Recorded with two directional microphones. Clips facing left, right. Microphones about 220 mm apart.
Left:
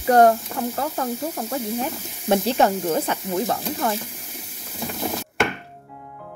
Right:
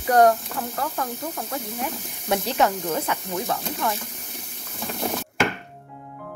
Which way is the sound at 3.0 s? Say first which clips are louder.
Left 4 dB; 30° left (ahead or behind).